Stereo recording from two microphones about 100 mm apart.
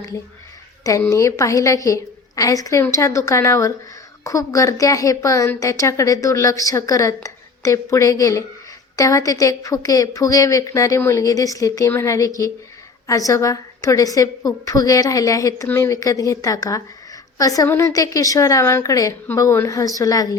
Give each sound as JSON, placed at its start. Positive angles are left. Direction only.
{"t": 1.1, "sound": "a woman's voice", "side_deg": 30}